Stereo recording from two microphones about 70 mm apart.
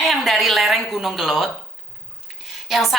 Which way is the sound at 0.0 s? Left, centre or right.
Centre.